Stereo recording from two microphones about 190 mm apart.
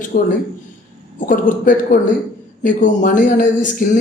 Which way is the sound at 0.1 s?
50° left (ahead or behind).